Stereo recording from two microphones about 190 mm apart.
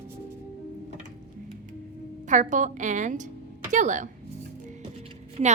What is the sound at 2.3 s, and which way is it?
A woman's voice, 40° right (ahead or behind).